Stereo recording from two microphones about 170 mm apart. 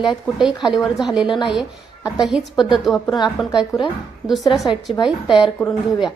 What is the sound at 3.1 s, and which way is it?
Speech, 25° left (ahead or behind).